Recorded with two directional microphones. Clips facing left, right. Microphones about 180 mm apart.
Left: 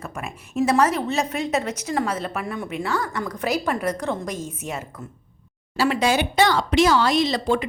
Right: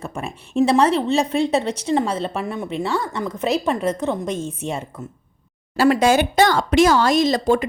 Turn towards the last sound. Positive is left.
turn(degrees=-45)  # may be behind; listen again after turning